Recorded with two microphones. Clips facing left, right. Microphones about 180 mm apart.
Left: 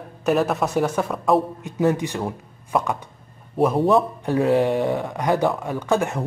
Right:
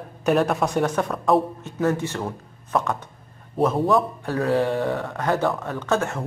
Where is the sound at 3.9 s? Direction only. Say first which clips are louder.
Left 3 dB; 20° left (ahead or behind).